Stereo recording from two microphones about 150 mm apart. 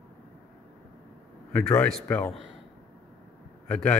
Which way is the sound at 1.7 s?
5° left (ahead or behind).